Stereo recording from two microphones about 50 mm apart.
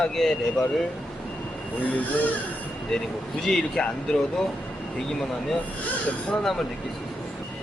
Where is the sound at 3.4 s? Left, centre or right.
Centre.